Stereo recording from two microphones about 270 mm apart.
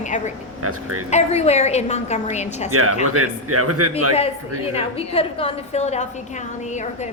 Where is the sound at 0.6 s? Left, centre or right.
Right.